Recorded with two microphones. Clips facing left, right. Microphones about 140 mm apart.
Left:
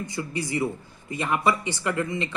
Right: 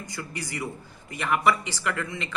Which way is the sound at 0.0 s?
25° left (ahead or behind).